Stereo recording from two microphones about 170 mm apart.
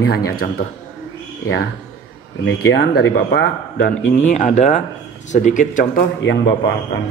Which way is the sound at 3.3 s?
60° left (ahead or behind).